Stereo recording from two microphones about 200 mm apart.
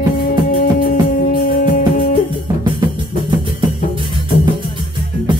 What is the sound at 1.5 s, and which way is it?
Music, 45° left (ahead or behind).